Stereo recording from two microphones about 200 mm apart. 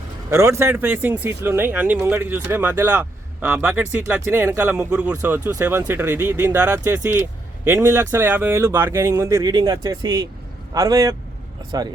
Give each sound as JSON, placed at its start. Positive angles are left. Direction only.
{"t": 0.3, "sound": "speech", "side_deg": -15}